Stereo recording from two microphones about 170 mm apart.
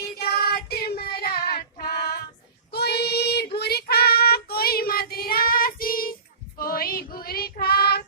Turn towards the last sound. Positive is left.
turn(degrees=65)  # may be behind; listen again after turning